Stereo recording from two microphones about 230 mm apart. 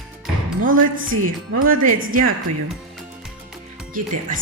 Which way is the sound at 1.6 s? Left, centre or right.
Right.